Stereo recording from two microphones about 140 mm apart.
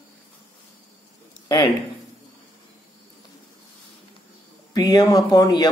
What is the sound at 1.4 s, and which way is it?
Speech, 35° left (ahead or behind).